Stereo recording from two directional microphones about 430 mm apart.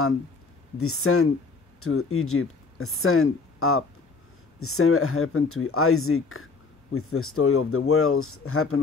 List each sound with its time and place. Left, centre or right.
0.7 s speech: left